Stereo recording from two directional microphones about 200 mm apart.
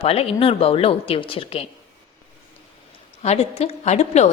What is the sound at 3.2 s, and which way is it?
A woman's voice, 30° left (ahead or behind).